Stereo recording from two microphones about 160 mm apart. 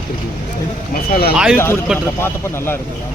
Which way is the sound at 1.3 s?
Centre (ahead or behind).